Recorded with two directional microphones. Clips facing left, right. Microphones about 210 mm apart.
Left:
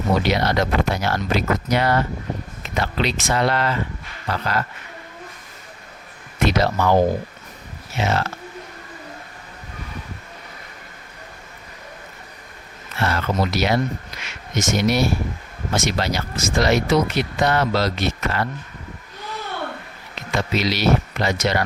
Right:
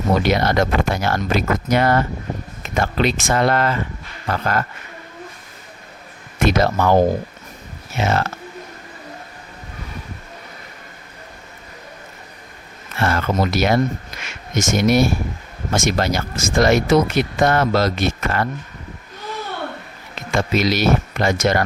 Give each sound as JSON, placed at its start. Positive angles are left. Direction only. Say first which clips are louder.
{"t": 0.2, "sound": "speech", "louder": "right 3 dB", "side_deg": -50}
{"t": 6.4, "sound": "speech", "louder": "right 2 dB", "side_deg": -50}
{"t": 13.0, "sound": "speech", "louder": "right 3 dB", "side_deg": -50}
{"t": 20.3, "sound": "speech", "louder": "right 4 dB", "side_deg": -50}